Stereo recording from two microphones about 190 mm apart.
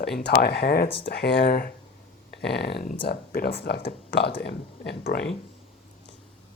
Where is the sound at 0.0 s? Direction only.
60° left (ahead or behind).